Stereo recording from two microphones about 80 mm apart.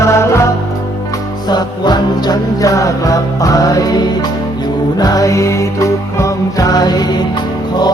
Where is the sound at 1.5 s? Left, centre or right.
Left.